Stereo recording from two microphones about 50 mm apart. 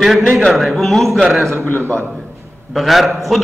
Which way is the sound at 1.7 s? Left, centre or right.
Left.